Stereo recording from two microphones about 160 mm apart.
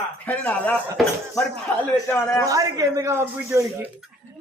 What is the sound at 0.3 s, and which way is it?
Speech, 10° left (ahead or behind).